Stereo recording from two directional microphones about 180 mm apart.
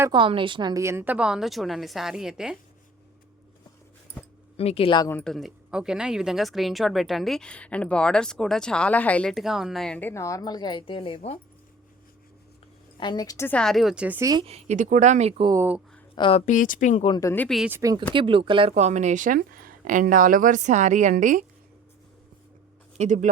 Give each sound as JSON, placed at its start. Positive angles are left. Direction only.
{"t": 0.1, "sound": "speech", "side_deg": -25}
{"t": 4.5, "sound": "speech", "side_deg": 35}
{"t": 5.0, "sound": "speech", "side_deg": 5}
{"t": 13.0, "sound": "speech", "side_deg": 25}
{"t": 14.3, "sound": "speech", "side_deg": -30}
{"t": 15.5, "sound": "speech", "side_deg": -10}
{"t": 16.1, "sound": "speech", "side_deg": 25}
{"t": 16.5, "sound": "speech", "side_deg": 45}
{"t": 17.1, "sound": "speech", "side_deg": 15}
{"t": 17.6, "sound": "speech", "side_deg": -15}
{"t": 18.1, "sound": "speech", "side_deg": -30}
{"t": 23.0, "sound": "speech", "side_deg": -45}